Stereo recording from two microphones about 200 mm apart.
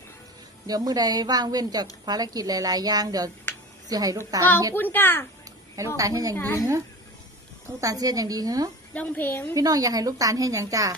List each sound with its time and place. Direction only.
0.7 s a woman's voice: 20° right (ahead or behind)
4.7 s a woman's voice: 10° left (ahead or behind)
6.0 s a woman's voice: 15° right (ahead or behind)
6.3 s a woman's voice: 10° left (ahead or behind)
7.8 s a woman's voice: 15° right (ahead or behind)
8.9 s a woman's voice: 10° left (ahead or behind)
9.6 s a woman's voice: 15° right (ahead or behind)